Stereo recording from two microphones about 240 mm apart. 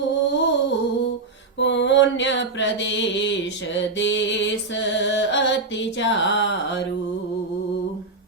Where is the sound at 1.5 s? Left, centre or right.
Left.